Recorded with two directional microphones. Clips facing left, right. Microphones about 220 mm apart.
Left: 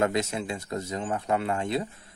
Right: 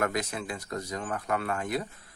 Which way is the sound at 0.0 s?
25° left (ahead or behind).